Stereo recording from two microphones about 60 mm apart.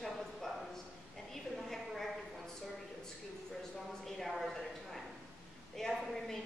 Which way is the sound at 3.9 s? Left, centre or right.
Centre.